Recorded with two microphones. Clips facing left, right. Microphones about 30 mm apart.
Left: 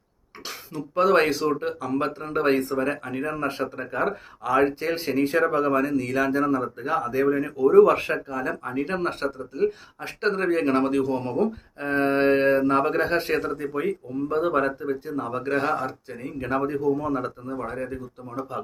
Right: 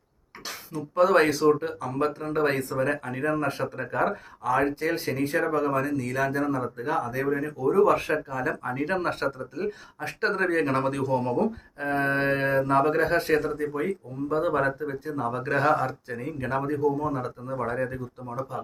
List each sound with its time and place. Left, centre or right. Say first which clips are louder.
0.8 s speech: left 1 dB; left
1.9 s a man's voice: even; left; by 4.1 s centre
4.4 s speech: left 2 dB; left
5.5 s a man's voice: left 3 dB; left
7.6 s speech: left 7 dB; left
8.0 s speech: even; centre
15.5 s speech: right 2 dB; centre
16.8 s speech: even; left
17.7 s speech: right 2 dB; centre
18.5 s a man's voice: left 2 dB; left